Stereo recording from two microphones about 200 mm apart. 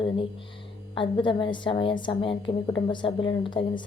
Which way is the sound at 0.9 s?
25° left (ahead or behind).